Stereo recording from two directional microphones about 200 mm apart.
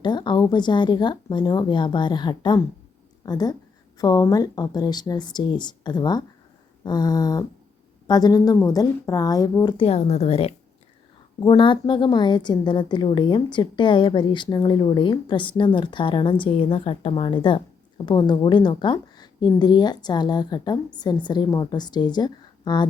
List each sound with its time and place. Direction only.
0.0 s a woman's voice: 20° left (ahead or behind)